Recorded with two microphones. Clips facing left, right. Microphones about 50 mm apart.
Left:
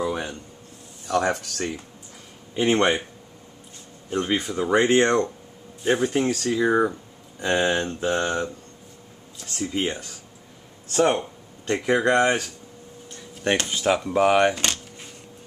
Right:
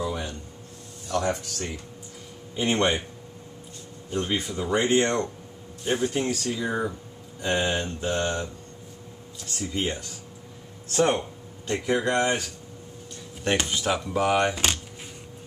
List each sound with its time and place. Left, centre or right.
0.0 s a sound: left
1.0 s speech: left
2.5 s speech: left
4.1 s speech: left
4.8 s speech: left
9.4 s speech: left
10.9 s speech: centre
11.7 s speech: left
13.7 s speech: left
14.2 s speech: left
14.5 s speech: centre